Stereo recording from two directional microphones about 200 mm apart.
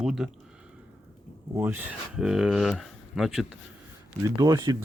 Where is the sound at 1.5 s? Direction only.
10° right (ahead or behind).